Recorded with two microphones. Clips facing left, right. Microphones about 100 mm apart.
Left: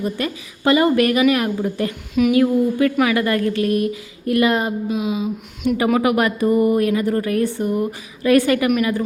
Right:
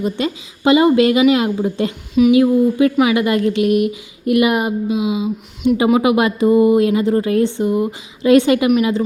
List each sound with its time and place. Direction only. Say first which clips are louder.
0.0 s a woman's voice: right 3 dB; 20° right (ahead or behind)